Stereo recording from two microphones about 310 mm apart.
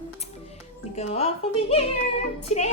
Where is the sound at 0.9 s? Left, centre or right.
Centre.